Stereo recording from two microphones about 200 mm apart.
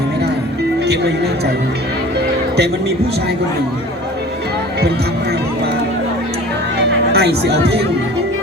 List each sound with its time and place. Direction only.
0.9 s speech: 55° right (ahead or behind)
7.1 s speech: 55° right (ahead or behind)